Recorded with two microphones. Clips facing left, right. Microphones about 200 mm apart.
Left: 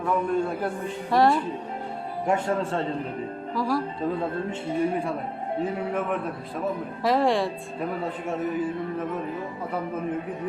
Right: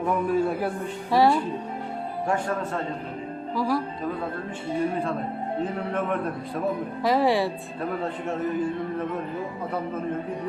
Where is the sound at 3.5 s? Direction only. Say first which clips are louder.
Right 1 dB; centre (ahead or behind).